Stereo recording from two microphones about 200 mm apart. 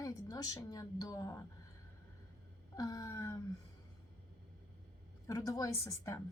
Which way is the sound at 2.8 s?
20° left (ahead or behind).